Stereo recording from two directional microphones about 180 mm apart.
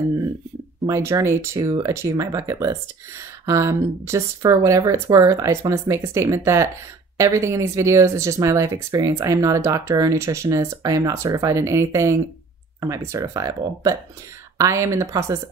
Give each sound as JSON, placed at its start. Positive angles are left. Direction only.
{"t": 0.8, "sound": "speech", "side_deg": -15}